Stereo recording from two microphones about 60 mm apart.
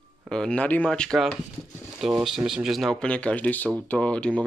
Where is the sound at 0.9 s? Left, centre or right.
Centre.